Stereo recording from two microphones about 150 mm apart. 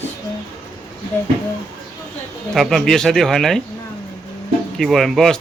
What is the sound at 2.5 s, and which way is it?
Speech, centre (ahead or behind).